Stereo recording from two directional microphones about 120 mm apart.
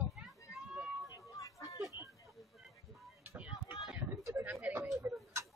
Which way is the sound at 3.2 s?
20° right (ahead or behind).